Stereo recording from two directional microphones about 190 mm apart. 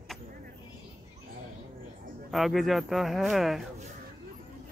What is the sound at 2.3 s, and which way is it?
Speech, centre (ahead or behind).